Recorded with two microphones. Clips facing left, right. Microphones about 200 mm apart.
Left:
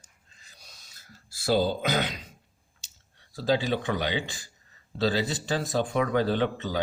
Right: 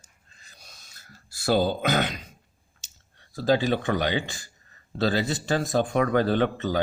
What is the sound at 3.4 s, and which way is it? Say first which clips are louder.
Speech: right 3 dB; 50° right (ahead or behind).